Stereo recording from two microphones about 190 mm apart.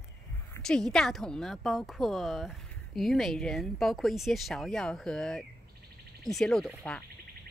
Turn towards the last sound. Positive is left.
turn(degrees=0)  # may be behind; listen again after turning